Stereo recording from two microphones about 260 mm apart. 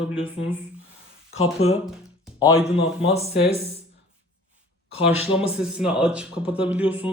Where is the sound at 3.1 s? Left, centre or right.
Left.